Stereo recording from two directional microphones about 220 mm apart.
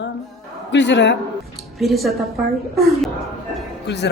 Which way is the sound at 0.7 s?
55° left (ahead or behind).